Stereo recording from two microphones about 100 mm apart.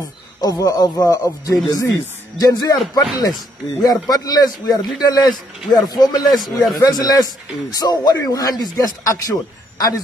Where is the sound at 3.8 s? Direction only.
40° left (ahead or behind).